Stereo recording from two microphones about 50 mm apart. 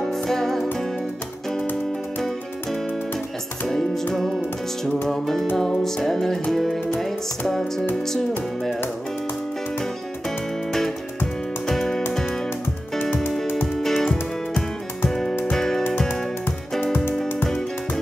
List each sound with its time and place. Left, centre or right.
0.0 s music: centre
2.1 s music: centre
11.6 s music: centre
13.0 s music: left
13.7 s music: centre
16.8 s music: left